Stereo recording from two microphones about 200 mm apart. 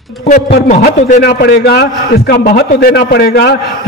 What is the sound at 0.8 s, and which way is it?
A man's voice, 45° left (ahead or behind).